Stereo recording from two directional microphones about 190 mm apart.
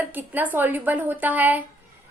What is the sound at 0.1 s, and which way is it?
A woman's voice, 10° right (ahead or behind).